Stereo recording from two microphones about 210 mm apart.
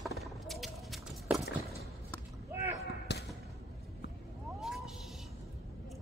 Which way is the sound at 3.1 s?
55° left (ahead or behind).